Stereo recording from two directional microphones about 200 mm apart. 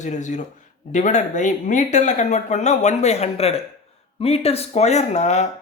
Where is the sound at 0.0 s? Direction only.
35° left (ahead or behind).